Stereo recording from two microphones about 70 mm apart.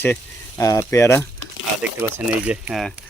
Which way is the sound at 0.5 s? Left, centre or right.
Left.